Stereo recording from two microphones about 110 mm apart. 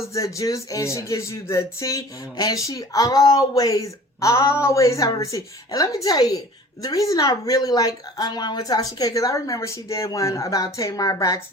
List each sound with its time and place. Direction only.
0.0 s a woman's voice: 30° left (ahead or behind)